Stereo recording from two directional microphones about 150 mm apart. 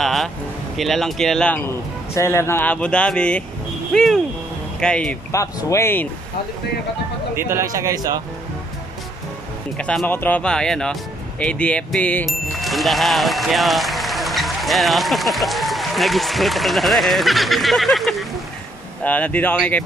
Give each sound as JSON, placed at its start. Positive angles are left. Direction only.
{"t": 0.0, "sound": "speech", "side_deg": 0}
{"t": 5.3, "sound": "speech", "side_deg": 20}
{"t": 7.3, "sound": "speech", "side_deg": -15}
{"t": 9.8, "sound": "speech", "side_deg": 10}